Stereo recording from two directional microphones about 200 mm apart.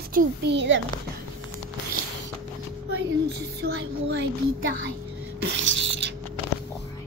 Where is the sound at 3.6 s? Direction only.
55° right (ahead or behind).